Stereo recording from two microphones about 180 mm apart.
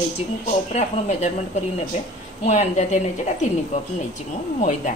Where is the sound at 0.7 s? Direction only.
35° left (ahead or behind).